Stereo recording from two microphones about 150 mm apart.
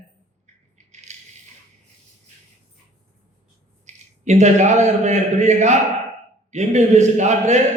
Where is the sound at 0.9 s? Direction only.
50° right (ahead or behind).